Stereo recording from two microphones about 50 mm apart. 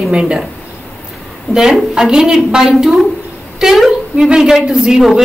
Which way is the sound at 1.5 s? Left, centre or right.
Centre.